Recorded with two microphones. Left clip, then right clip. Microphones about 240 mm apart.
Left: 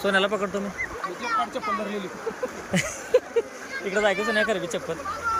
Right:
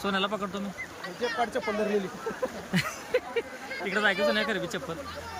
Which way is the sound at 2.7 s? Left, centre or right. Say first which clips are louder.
Left 8 dB; centre.